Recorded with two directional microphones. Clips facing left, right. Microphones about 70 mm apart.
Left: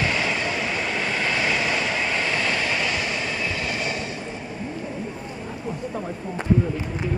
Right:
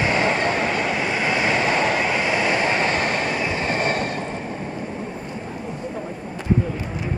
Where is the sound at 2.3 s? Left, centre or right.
Right.